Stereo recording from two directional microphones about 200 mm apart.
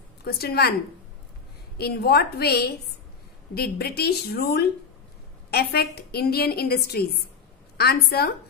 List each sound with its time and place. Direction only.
0.2 s a woman's voice: 50° left (ahead or behind)
1.8 s a woman's voice: 50° left (ahead or behind)